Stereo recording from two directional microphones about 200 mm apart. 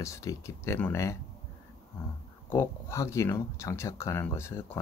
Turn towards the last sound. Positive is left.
turn(degrees=10)  # may be behind; listen again after turning